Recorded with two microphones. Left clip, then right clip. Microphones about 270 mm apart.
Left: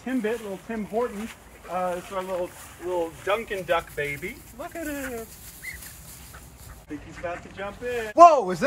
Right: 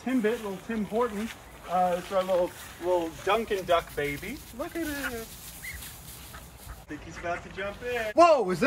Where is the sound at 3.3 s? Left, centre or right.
Right.